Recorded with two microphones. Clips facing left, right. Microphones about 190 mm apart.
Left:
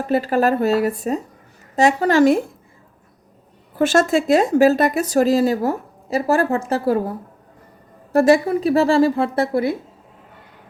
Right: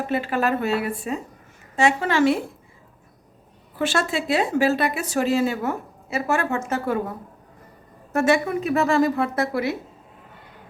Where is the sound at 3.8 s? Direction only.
45° left (ahead or behind).